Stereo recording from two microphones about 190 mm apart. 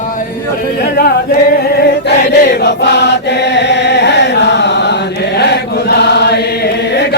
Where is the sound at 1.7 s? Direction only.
60° left (ahead or behind).